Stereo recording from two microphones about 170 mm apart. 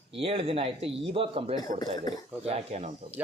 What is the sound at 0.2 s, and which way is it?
Speech, 35° right (ahead or behind).